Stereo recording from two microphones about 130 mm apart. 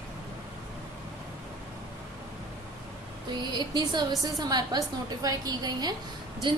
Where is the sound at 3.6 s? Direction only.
35° right (ahead or behind).